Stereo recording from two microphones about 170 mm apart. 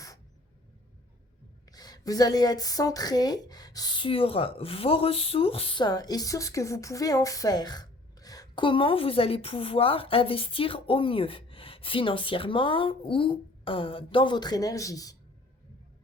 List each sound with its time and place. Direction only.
1.7 s speech: 20° left (ahead or behind)